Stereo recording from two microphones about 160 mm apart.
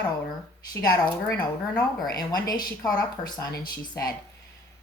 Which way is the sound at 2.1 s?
25° left (ahead or behind).